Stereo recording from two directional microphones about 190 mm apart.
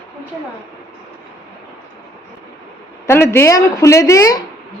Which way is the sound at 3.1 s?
15° left (ahead or behind).